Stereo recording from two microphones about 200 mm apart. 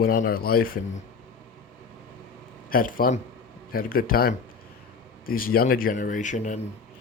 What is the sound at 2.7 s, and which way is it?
Speech, 45° left (ahead or behind).